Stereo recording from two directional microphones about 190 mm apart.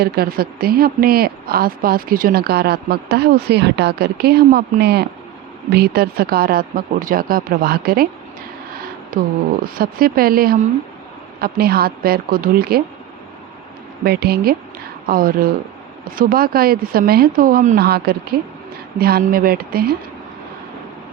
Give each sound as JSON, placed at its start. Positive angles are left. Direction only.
{"t": 0.0, "sound": "a woman's voice", "side_deg": -55}
{"t": 9.1, "sound": "speech", "side_deg": -45}
{"t": 14.0, "sound": "a woman's voice", "side_deg": -55}